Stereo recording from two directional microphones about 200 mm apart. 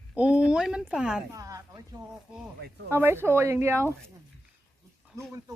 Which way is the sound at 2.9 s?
10° right (ahead or behind).